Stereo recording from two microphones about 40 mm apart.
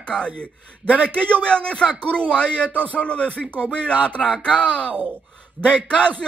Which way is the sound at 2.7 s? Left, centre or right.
Left.